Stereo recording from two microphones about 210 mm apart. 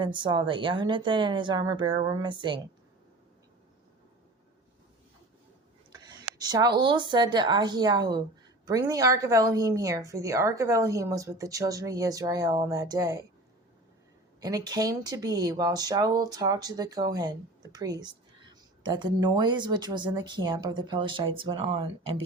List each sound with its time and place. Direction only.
0.0 s speech: 20° right (ahead or behind)
5.9 s a sound: 20° right (ahead or behind)
6.4 s a woman's voice: 20° right (ahead or behind)
14.4 s a woman's voice: 20° right (ahead or behind)